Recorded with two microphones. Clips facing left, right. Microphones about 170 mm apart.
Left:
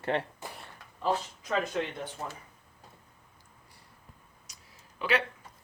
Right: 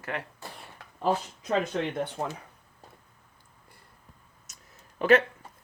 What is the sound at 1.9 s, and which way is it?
Speech, 70° right (ahead or behind).